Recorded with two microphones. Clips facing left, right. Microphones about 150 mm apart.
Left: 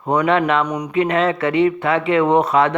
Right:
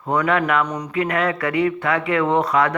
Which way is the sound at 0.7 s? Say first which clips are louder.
Left 4 dB; 15° left (ahead or behind).